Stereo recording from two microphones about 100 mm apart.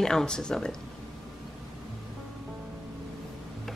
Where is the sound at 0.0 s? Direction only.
5° left (ahead or behind).